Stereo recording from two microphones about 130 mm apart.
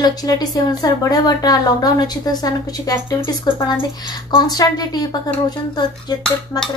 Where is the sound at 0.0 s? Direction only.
30° left (ahead or behind).